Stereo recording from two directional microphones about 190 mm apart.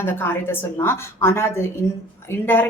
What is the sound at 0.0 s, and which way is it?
Speech, 10° left (ahead or behind).